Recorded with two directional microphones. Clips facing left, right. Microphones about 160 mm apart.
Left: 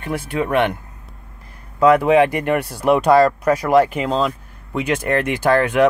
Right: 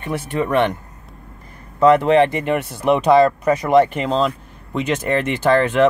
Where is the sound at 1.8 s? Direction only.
10° left (ahead or behind).